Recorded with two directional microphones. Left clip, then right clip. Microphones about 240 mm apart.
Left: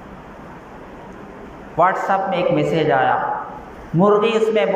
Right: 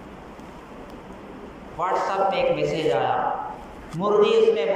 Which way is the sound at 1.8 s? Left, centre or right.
Left.